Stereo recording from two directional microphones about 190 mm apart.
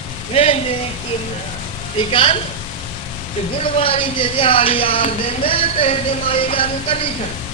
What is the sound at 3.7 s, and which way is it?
Speech, 30° left (ahead or behind).